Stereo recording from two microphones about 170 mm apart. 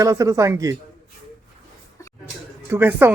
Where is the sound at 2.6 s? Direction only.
15° right (ahead or behind).